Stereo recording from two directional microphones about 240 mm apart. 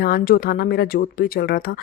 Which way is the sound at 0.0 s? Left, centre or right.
Left.